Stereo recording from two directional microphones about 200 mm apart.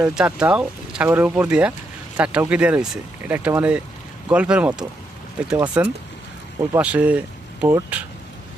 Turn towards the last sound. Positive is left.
turn(degrees=-10)  # may be behind; listen again after turning